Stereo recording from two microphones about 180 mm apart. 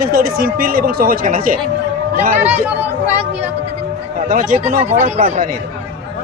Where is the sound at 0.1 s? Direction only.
55° right (ahead or behind).